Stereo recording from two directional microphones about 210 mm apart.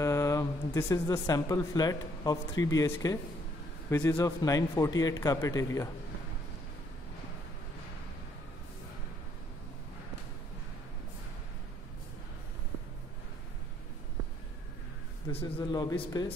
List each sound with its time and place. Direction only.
0.0 s a man's voice: 15° left (ahead or behind)
15.3 s a man's voice: 20° left (ahead or behind)